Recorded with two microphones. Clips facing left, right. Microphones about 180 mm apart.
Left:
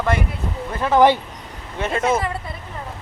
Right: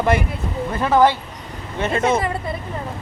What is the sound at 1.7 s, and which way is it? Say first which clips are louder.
Speech: right 1 dB; 5° left (ahead or behind).